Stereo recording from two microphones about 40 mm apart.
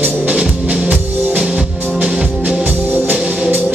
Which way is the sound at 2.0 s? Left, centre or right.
Right.